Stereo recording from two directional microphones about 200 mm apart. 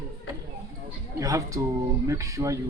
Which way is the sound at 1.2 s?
15° right (ahead or behind).